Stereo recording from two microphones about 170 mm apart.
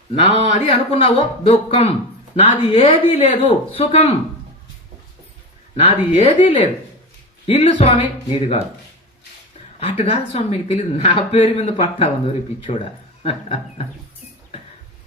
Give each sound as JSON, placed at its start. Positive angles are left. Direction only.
{"t": 0.1, "sound": "speech", "side_deg": 40}
{"t": 5.7, "sound": "speech", "side_deg": 35}
{"t": 9.8, "sound": "speech", "side_deg": 35}